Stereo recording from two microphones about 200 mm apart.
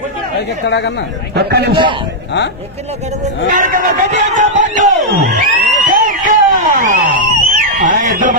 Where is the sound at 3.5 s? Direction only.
40° right (ahead or behind).